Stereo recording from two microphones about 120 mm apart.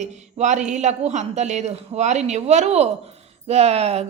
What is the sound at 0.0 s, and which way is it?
A woman's voice, 80° right.